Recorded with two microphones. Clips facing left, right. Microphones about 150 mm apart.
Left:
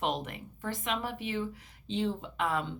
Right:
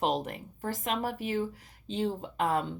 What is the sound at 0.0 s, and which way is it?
A woman's voice, 35° right (ahead or behind).